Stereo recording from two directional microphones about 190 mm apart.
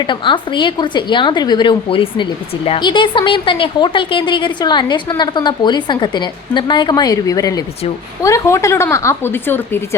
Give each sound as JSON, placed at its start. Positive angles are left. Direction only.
{"t": 0.0, "sound": "a woman's voice", "side_deg": 25}